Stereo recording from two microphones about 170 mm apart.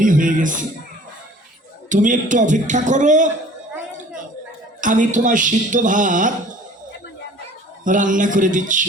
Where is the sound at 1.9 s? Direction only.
50° right (ahead or behind).